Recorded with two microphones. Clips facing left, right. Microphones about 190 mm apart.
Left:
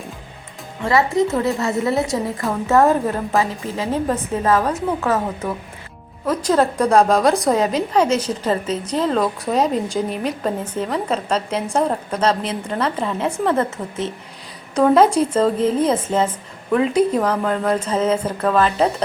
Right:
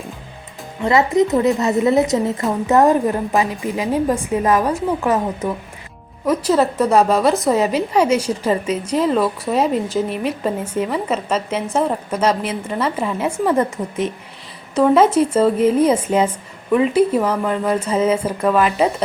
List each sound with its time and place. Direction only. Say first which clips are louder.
0.8 s a woman's voice: right 2 dB; 20° right (ahead or behind)